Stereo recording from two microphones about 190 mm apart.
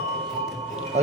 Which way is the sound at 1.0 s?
35° right (ahead or behind).